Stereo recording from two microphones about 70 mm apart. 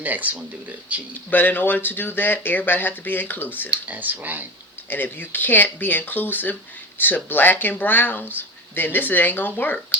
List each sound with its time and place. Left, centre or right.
0.0 s speech: right
1.3 s speech: left
3.7 s speech: right
4.9 s speech: left